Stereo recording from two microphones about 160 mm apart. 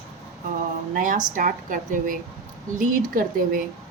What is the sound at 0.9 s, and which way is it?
Speech, 60° right (ahead or behind).